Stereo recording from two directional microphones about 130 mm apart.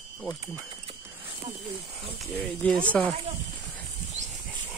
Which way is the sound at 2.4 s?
10° left (ahead or behind).